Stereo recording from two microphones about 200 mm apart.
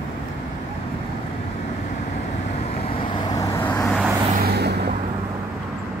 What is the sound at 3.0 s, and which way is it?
Vehicle, 20° left (ahead or behind).